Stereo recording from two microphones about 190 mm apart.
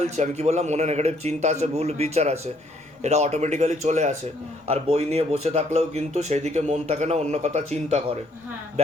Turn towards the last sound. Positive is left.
turn(degrees=-35)  # may be behind; listen again after turning